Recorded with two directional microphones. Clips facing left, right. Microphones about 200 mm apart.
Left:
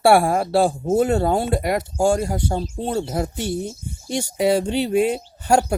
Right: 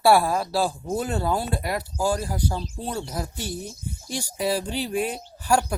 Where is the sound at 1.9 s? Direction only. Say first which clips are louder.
Left 6 dB; 25° left (ahead or behind).